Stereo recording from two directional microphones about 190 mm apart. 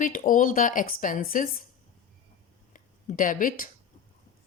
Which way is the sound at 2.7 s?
45° left (ahead or behind).